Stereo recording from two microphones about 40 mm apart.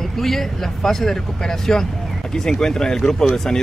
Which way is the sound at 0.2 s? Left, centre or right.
Centre.